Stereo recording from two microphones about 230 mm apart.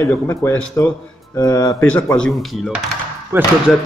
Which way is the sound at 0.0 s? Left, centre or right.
Centre.